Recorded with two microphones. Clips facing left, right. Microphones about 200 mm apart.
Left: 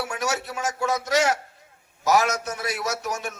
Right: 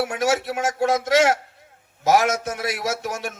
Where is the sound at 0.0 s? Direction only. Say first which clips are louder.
Right 6 dB; 55° right (ahead or behind).